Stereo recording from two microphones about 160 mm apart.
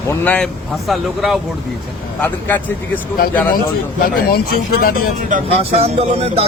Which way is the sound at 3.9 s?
65° left (ahead or behind).